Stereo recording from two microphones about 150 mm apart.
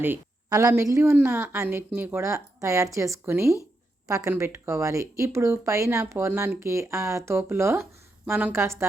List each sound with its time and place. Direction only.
0.0 s speech: 15° right (ahead or behind)